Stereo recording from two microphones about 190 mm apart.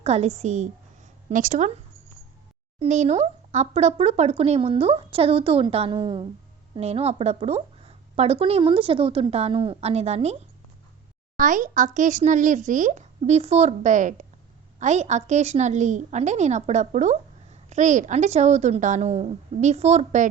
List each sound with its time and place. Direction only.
0.0 s a woman's voice: 35° right (ahead or behind)
11.3 s a woman's voice: 45° right (ahead or behind)